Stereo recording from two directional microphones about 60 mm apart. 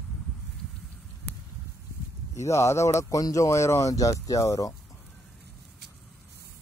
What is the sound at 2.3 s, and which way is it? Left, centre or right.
Speech, left.